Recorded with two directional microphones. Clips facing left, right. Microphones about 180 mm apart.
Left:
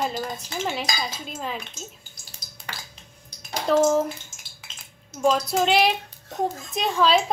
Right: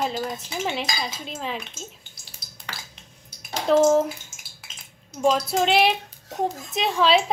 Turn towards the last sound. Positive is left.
turn(degrees=-5)  # may be behind; listen again after turning